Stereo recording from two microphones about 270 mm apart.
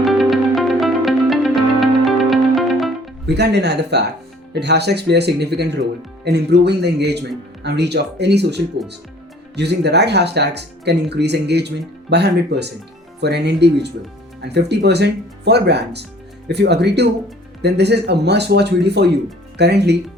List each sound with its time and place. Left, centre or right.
0.0 s music: centre
3.2 s speech: right